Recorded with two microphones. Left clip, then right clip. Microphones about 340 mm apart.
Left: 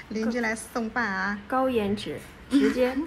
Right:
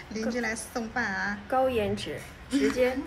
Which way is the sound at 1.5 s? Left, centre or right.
Centre.